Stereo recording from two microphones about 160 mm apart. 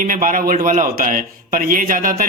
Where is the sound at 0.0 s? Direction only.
55° right (ahead or behind).